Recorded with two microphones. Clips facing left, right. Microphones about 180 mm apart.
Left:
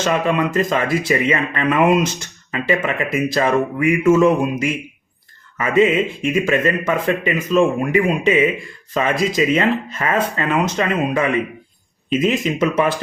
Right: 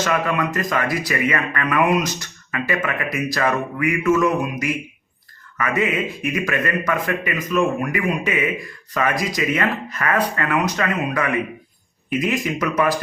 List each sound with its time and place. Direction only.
0.0 s speech: 25° left (ahead or behind)